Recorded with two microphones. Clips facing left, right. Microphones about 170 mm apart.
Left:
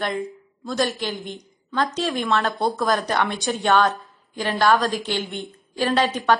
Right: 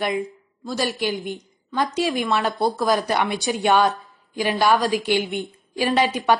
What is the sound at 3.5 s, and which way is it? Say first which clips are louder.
A woman's voice: right 1 dB; 15° right (ahead or behind).